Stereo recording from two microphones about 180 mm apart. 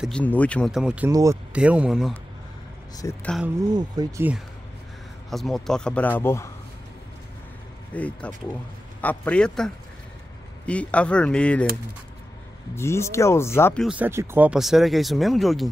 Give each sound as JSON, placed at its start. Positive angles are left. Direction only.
{"t": 0.0, "sound": "speech", "side_deg": 5}
{"t": 0.7, "sound": "speech", "side_deg": -5}
{"t": 1.1, "sound": "speech", "side_deg": -15}
{"t": 1.5, "sound": "speech", "side_deg": -5}
{"t": 3.0, "sound": "speech", "side_deg": 20}
{"t": 3.7, "sound": "speech", "side_deg": -20}
{"t": 5.3, "sound": "speech", "side_deg": 0}
{"t": 7.9, "sound": "speech", "side_deg": 5}
{"t": 12.7, "sound": "speech", "side_deg": 15}
{"t": 13.7, "sound": "speech", "side_deg": -5}